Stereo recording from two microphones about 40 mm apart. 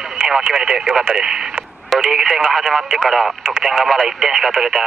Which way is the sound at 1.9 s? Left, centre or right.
Centre.